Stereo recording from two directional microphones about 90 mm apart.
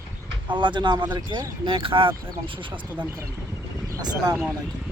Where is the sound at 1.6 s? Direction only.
75° right (ahead or behind).